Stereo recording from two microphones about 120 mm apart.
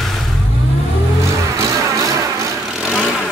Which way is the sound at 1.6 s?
25° right (ahead or behind).